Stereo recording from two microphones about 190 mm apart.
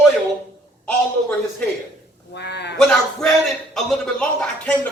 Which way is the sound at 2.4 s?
60° left (ahead or behind).